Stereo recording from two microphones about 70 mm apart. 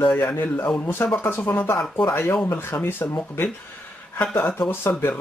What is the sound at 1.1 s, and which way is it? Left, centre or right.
Speech, left.